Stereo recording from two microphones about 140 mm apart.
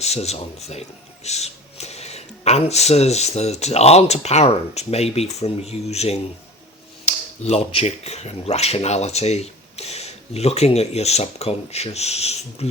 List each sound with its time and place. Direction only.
0.0 s speech: 50° left (ahead or behind)